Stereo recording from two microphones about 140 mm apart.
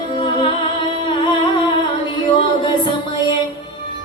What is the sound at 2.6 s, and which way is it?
Music, 35° left (ahead or behind).